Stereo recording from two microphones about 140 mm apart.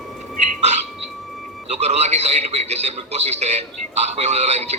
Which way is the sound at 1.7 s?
50° right (ahead or behind).